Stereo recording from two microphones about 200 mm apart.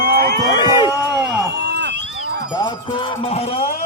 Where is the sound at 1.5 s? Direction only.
55° right (ahead or behind).